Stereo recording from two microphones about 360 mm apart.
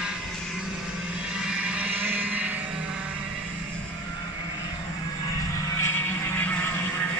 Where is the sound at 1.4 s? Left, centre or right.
Centre.